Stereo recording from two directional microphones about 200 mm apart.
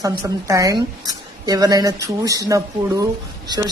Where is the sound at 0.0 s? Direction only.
15° right (ahead or behind).